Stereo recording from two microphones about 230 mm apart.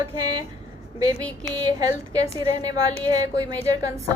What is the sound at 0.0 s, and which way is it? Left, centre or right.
Speech, centre.